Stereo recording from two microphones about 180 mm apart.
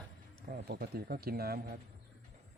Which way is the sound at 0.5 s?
55° right (ahead or behind).